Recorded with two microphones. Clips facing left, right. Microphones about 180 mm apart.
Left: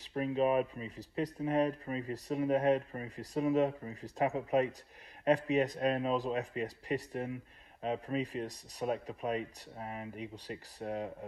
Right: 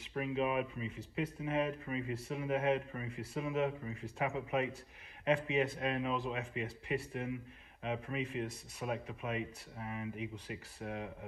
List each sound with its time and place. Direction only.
0.1 s speech: 35° left (ahead or behind)